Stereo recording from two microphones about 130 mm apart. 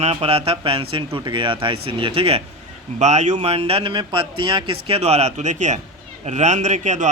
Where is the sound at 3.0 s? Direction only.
60° right (ahead or behind).